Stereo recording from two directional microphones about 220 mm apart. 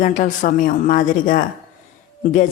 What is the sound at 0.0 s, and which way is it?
Speech, 35° left (ahead or behind).